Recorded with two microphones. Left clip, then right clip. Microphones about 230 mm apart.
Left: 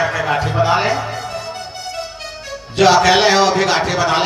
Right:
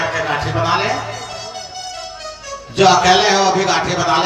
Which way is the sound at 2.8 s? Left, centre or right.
Left.